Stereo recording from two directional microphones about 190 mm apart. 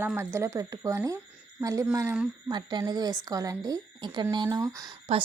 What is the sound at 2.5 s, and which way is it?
A woman's voice, 25° right (ahead or behind).